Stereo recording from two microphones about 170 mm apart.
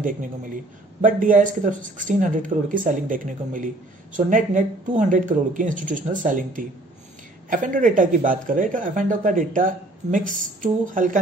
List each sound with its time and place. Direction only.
1.0 s speech: 50° right (ahead or behind)